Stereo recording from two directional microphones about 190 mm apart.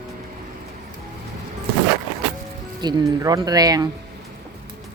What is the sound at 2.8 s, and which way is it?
Speech, 25° right (ahead or behind).